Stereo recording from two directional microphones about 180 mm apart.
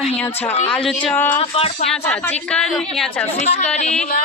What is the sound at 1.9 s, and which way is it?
Speech, 5° left (ahead or behind).